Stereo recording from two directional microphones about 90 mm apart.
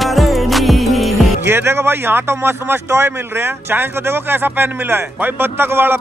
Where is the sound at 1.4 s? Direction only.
25° right (ahead or behind).